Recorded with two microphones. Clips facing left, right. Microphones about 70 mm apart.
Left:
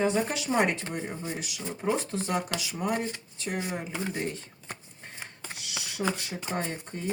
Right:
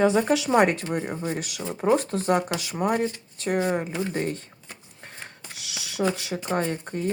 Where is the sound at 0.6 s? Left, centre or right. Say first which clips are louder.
Right 6 dB; right.